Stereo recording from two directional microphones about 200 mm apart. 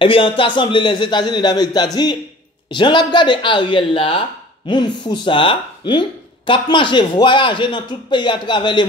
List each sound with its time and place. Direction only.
0.0 s speech: 25° left (ahead or behind)